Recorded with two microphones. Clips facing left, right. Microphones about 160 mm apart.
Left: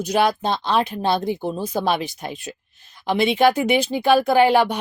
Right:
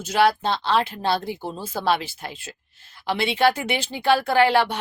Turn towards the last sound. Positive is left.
turn(degrees=15)  # may be behind; listen again after turning